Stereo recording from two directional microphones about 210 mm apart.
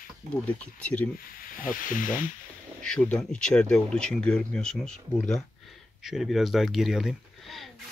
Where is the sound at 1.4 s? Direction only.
40° left (ahead or behind).